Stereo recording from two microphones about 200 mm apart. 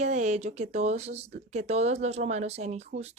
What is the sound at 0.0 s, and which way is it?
Speech, 35° right (ahead or behind).